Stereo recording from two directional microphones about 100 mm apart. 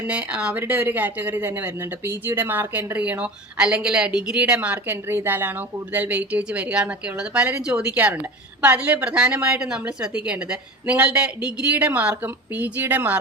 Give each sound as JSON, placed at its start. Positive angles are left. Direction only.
{"t": 0.1, "sound": "speech", "side_deg": -10}